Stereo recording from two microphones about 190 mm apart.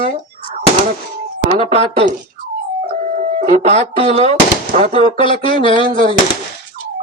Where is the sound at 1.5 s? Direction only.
30° right (ahead or behind).